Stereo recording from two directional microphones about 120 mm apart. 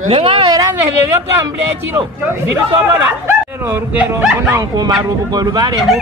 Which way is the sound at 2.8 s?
20° right (ahead or behind).